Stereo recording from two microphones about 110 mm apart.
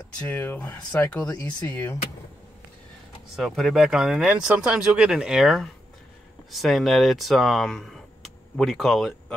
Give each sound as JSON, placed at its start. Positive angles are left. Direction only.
{"t": 0.2, "sound": "speech", "side_deg": 15}
{"t": 3.3, "sound": "speech", "side_deg": 0}